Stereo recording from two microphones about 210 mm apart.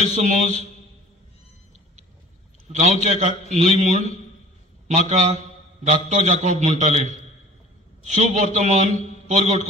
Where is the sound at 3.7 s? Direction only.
30° right (ahead or behind).